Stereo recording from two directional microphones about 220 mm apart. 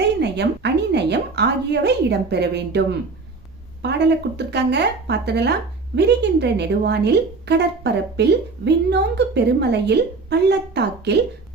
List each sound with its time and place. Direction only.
0.0 s a woman's voice: 50° right (ahead or behind)